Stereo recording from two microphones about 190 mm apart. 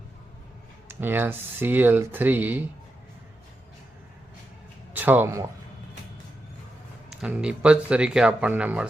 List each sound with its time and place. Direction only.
0.9 s speech: 10° right (ahead or behind)
4.9 s speech: 10° right (ahead or behind)
7.1 s speech: 5° right (ahead or behind)